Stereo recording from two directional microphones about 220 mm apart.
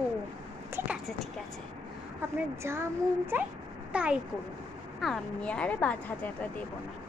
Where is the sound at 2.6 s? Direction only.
10° right (ahead or behind); by 6.3 s 5° left (ahead or behind).